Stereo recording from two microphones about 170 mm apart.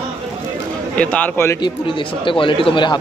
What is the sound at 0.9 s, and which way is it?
Speech, 10° left (ahead or behind).